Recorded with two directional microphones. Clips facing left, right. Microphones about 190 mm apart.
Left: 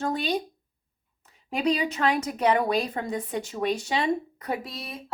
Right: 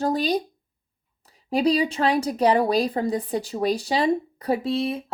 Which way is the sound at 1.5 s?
35° right (ahead or behind).